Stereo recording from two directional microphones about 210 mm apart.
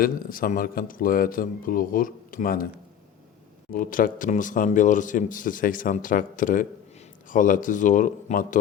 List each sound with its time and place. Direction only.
0.0 s a man's voice: 45° left (ahead or behind)
3.7 s speech: 40° left (ahead or behind)